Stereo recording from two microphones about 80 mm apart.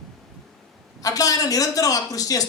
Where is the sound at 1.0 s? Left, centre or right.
Left.